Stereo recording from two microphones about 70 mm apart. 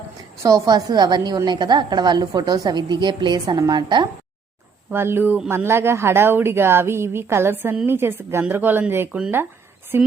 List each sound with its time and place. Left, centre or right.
0.4 s a woman's voice: right
0.9 s a woman's voice: right
4.9 s a woman's voice: right